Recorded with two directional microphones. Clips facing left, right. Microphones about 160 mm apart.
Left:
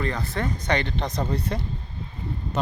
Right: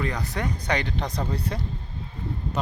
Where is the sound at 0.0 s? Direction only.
15° right (ahead or behind).